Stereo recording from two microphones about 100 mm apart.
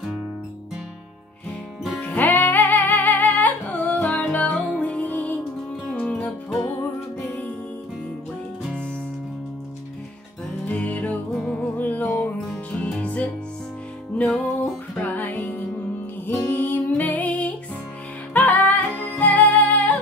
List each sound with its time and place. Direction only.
2.0 s music: 15° left (ahead or behind)
10.7 s music: 15° left (ahead or behind)